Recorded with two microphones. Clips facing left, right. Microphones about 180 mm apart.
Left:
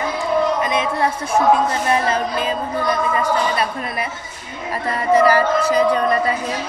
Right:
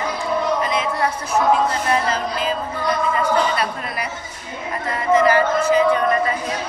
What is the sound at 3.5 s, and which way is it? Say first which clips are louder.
Speech: left 2 dB; 25° left (ahead or behind).